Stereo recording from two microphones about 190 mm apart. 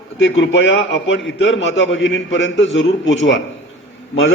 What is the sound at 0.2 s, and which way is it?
A man's voice, 85° left.